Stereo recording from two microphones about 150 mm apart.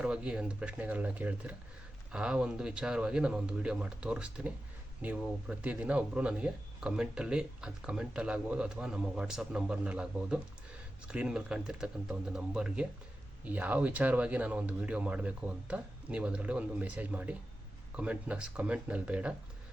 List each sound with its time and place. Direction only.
0.0 s speech: 5° right (ahead or behind)